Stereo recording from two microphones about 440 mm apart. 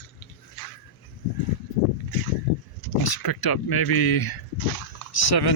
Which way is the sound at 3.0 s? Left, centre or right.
Left.